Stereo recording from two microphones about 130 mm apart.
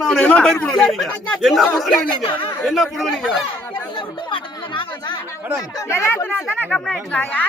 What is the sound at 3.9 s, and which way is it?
Speech, 35° left (ahead or behind).